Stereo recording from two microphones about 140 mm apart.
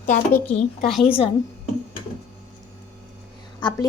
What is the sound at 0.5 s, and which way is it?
Speech, 60° left (ahead or behind).